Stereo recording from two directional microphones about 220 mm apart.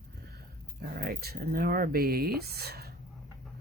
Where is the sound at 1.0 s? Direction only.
45° right (ahead or behind).